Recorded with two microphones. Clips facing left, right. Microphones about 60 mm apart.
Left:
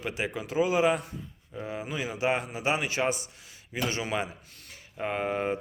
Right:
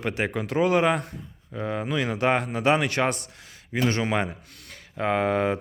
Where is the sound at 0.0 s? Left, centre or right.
Right.